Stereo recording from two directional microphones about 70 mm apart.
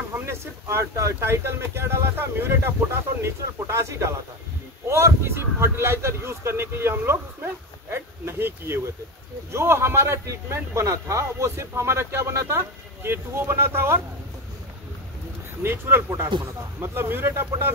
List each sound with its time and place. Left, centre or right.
0.1 s a man's voice: right
15.6 s a man's voice: right